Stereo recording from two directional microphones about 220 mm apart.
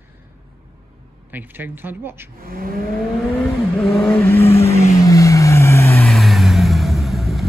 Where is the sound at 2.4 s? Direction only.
40° right (ahead or behind).